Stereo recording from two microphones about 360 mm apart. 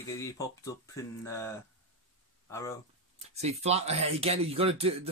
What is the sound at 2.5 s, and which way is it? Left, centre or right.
Speech, centre.